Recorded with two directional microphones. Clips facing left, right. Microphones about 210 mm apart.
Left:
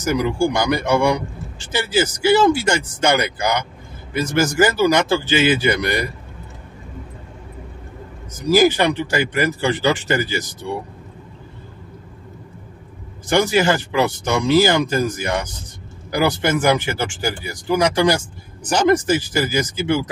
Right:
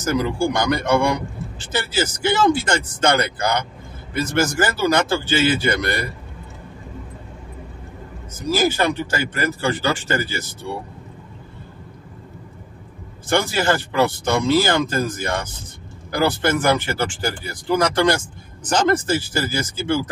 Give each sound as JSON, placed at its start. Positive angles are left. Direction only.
{"t": 0.0, "sound": "speech", "side_deg": 15}
{"t": 8.5, "sound": "speech", "side_deg": 15}
{"t": 13.3, "sound": "speech", "side_deg": 15}